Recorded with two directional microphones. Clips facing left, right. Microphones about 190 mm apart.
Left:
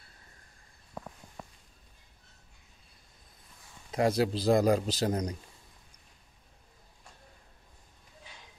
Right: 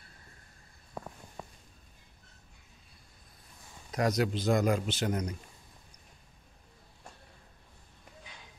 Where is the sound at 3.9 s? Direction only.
30° left (ahead or behind).